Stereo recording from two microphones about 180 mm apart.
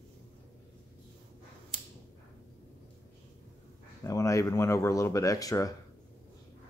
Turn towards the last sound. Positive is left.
turn(degrees=20)  # may be behind; listen again after turning